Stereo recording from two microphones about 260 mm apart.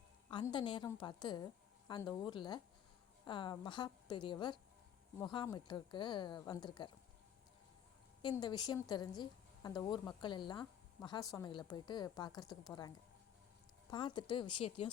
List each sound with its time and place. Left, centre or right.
0.3 s a woman's voice: centre
8.2 s a woman's voice: centre
13.9 s speech: centre